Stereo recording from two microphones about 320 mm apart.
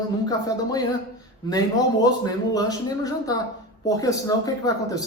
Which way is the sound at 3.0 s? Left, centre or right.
Centre.